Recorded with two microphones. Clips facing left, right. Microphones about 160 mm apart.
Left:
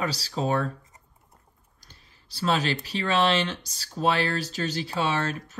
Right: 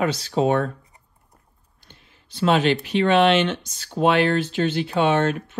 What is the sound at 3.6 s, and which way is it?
Speech, 35° left (ahead or behind).